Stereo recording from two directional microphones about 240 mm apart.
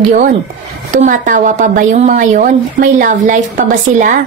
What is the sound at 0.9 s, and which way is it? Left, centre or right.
A woman's voice, right.